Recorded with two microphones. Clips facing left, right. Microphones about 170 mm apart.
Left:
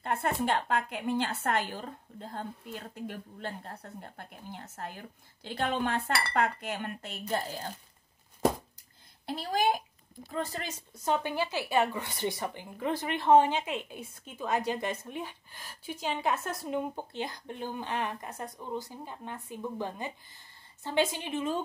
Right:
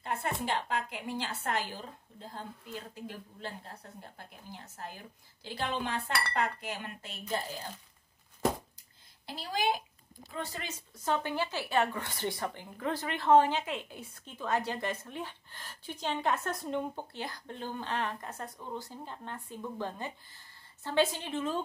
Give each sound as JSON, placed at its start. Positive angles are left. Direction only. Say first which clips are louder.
{"t": 0.0, "sound": "a woman's voice", "louder": "left 4 dB", "side_deg": 55}
{"t": 9.2, "sound": "speech", "louder": "left 4 dB", "side_deg": 50}
{"t": 10.3, "sound": "speech", "louder": "left 4 dB", "side_deg": 40}
{"t": 11.1, "sound": "speech", "louder": "left 2 dB", "side_deg": 15}